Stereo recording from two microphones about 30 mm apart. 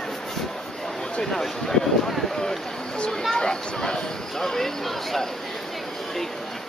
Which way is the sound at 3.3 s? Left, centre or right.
Left.